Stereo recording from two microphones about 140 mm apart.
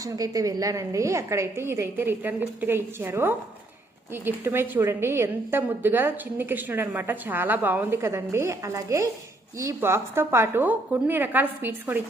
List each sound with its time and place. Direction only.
0.0 s a woman's voice: 25° right (ahead or behind)